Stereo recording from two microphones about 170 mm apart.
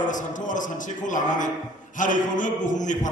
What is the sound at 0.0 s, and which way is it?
A man's voice, 50° left (ahead or behind).